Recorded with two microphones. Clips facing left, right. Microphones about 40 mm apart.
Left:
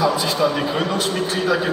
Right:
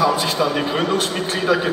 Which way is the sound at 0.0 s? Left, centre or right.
Right.